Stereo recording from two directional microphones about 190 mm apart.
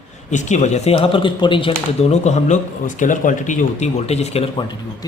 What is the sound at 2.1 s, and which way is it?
Speech, 35° left (ahead or behind).